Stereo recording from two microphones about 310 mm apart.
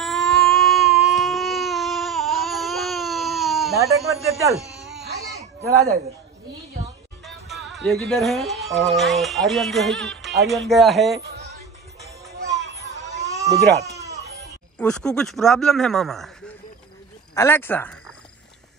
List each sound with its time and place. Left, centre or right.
0.0 s baby cry: centre
3.7 s speech: centre
5.7 s speech: right
7.2 s speech: centre
13.5 s speech: right
14.8 s speech: centre